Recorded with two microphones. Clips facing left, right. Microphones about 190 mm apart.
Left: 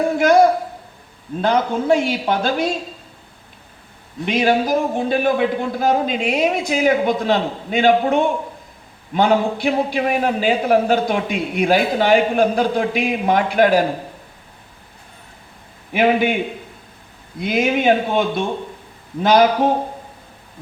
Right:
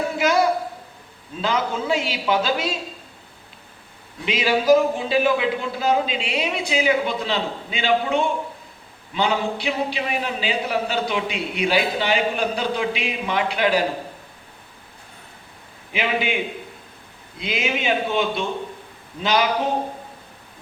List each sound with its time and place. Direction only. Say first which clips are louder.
0.2 s a man's voice: left 6 dB; 50° left (ahead or behind)
4.3 s a man's voice: even; 50° left (ahead or behind)
15.9 s a man's voice: left 8 dB; 50° left (ahead or behind)